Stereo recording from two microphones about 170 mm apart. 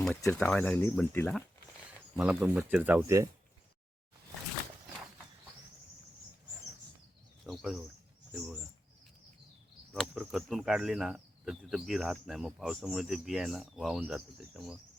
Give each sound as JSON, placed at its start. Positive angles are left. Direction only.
{"t": 0.3, "sound": "speech", "side_deg": 5}
{"t": 2.1, "sound": "speech", "side_deg": -5}
{"t": 7.4, "sound": "speech", "side_deg": 0}
{"t": 8.3, "sound": "bird", "side_deg": 0}
{"t": 9.9, "sound": "speech", "side_deg": 0}